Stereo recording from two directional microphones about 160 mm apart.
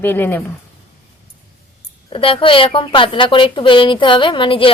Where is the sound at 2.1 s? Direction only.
35° left (ahead or behind).